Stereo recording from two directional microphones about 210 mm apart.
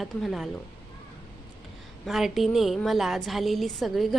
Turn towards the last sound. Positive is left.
turn(degrees=0)  # may be behind; listen again after turning